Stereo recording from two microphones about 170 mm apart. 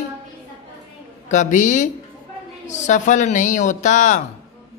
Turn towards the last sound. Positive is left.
turn(degrees=45)  # may be behind; listen again after turning